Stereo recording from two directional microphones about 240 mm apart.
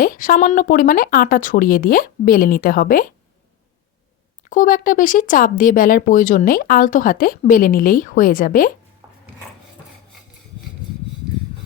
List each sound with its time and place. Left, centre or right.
0.0 s speech: left
4.4 s speech: left